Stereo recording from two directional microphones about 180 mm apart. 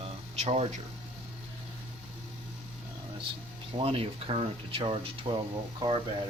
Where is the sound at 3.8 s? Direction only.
30° right (ahead or behind).